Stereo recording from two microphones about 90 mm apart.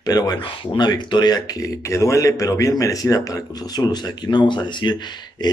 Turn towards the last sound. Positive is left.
turn(degrees=60)  # may be behind; listen again after turning